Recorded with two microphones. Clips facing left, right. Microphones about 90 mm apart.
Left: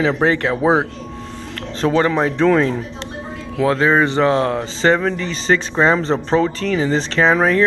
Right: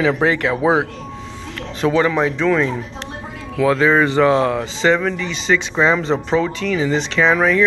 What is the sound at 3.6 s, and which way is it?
Speech, 30° left (ahead or behind).